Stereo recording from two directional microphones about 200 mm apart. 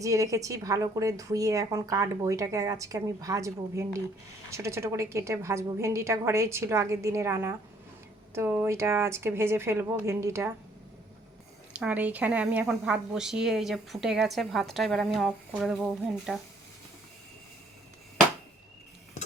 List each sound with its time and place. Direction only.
0.0 s a woman's voice: 15° right (ahead or behind)
11.7 s a woman's voice: 5° right (ahead or behind)